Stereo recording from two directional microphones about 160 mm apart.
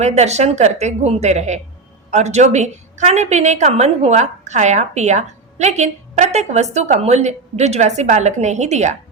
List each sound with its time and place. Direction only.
0.0 s a woman's voice: 45° right (ahead or behind)